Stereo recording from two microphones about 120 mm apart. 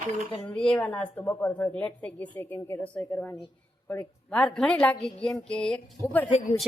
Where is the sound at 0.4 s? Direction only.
5° left (ahead or behind).